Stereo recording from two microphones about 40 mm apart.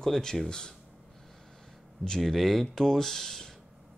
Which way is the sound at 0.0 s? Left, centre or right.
Centre.